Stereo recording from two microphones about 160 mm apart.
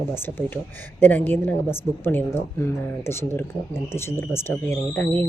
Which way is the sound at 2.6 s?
15° left (ahead or behind).